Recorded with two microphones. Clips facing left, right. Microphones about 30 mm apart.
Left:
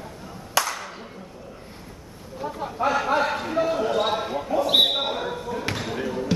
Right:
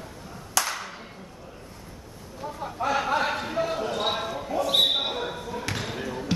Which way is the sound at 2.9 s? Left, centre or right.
Centre.